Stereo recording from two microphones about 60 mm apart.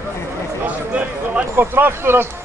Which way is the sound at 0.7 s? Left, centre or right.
Right.